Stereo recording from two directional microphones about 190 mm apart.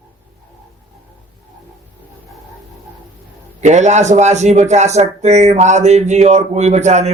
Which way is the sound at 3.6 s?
40° right (ahead or behind).